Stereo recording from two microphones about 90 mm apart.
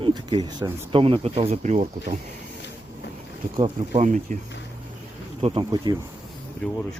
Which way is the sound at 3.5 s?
55° right (ahead or behind).